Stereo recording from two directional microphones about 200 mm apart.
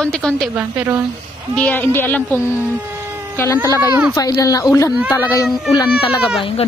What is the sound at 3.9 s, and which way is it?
Speech, 10° right (ahead or behind).